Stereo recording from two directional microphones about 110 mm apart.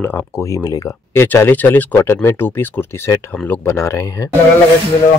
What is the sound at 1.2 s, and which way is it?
Speech, 20° left (ahead or behind).